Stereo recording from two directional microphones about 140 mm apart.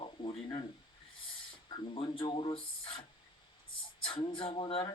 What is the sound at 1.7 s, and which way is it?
Speech, 40° left (ahead or behind).